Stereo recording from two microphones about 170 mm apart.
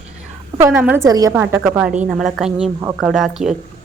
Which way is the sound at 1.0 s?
20° right (ahead or behind).